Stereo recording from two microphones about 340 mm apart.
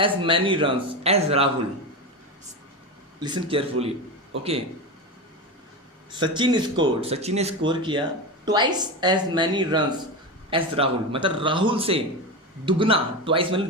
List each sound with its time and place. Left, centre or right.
0.0 s speech: centre
3.2 s speech: centre
6.1 s speech: centre